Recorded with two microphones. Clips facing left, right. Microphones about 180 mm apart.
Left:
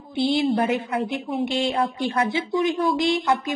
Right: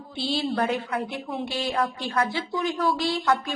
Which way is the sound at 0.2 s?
20° left (ahead or behind).